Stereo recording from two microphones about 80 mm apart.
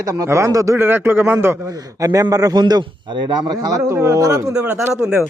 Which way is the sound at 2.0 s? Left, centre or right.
Right.